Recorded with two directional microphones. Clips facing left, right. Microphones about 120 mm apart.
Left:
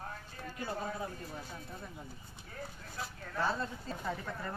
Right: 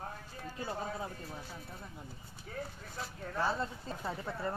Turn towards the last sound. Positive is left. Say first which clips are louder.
# right 3 dB
turn(degrees=-25)  # may be behind; listen again after turning